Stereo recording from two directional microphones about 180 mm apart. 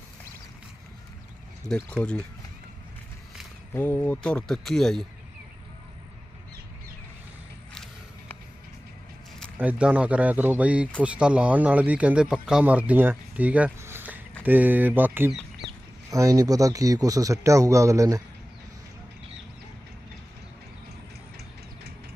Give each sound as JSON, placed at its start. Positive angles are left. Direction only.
{"t": 1.6, "sound": "speech", "side_deg": 5}
{"t": 3.8, "sound": "speech", "side_deg": 10}
{"t": 9.6, "sound": "speech", "side_deg": -5}